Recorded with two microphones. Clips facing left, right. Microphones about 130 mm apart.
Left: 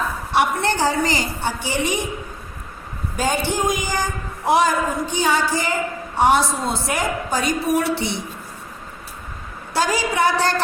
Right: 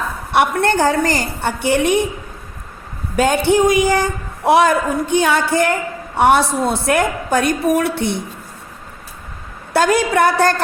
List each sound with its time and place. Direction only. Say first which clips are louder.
0.3 s a woman's voice: right 4 dB; 55° right (ahead or behind)
3.2 s a woman's voice: right 8 dB; 65° right (ahead or behind)
9.7 s a woman's voice: right 6 dB; 55° right (ahead or behind)